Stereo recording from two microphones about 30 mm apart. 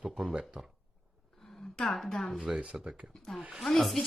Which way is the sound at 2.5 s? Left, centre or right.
Centre.